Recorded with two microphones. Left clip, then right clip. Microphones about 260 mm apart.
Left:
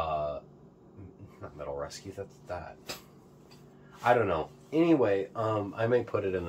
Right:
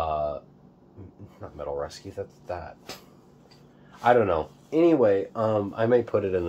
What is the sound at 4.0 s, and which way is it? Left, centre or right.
Speech, right.